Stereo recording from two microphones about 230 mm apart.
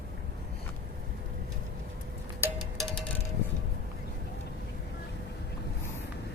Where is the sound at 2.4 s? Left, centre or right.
Centre.